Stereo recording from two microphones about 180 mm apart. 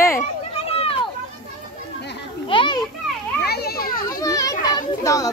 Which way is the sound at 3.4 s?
60° left (ahead or behind).